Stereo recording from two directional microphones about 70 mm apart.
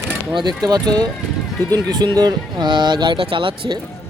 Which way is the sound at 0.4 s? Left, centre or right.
Right.